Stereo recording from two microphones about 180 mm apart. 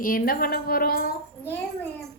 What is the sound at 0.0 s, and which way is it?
A woman's voice, 55° left (ahead or behind).